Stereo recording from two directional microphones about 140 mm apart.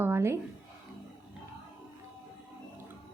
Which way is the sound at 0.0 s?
15° right (ahead or behind).